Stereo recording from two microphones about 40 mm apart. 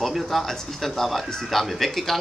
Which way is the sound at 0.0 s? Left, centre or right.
Centre.